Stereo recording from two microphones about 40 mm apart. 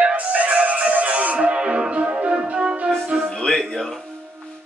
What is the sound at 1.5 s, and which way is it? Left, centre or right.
Music, right.